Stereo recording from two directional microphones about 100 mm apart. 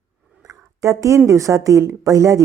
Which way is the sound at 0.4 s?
30° right (ahead or behind).